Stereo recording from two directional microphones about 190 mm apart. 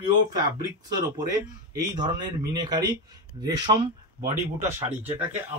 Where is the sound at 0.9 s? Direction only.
20° right (ahead or behind).